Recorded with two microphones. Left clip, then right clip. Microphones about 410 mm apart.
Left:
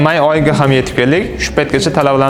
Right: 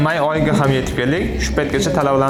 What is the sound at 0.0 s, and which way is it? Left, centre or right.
A man's voice, left.